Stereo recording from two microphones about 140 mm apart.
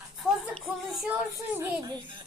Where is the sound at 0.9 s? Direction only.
5° right (ahead or behind).